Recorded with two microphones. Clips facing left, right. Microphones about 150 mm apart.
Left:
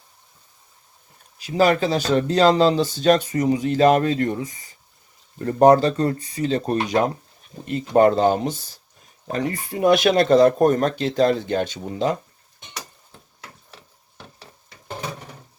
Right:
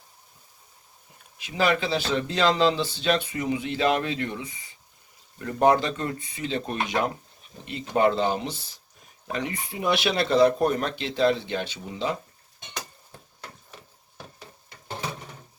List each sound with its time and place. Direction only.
1.4 s speech: 40° left (ahead or behind)